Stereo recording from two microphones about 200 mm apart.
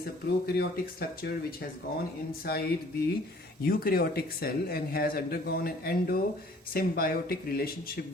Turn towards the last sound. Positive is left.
turn(degrees=50)  # may be behind; listen again after turning